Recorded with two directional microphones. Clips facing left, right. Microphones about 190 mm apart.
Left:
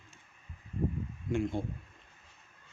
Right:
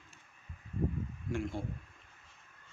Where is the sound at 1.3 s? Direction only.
20° left (ahead or behind).